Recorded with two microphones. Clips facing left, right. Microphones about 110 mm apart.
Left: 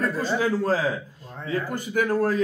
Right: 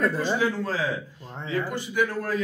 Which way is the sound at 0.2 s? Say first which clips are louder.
Left 2 dB; 40° left (ahead or behind).